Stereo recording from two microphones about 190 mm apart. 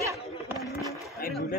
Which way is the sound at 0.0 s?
15° right (ahead or behind).